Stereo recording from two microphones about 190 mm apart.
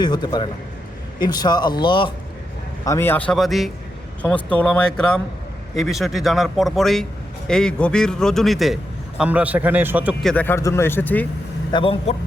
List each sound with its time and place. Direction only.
0.0 s speech: 20° left (ahead or behind)
2.8 s a man's voice: 15° left (ahead or behind); by 10.2 s 10° right (ahead or behind)
10.2 s speech: 10° left (ahead or behind)
11.7 s speech: 30° left (ahead or behind)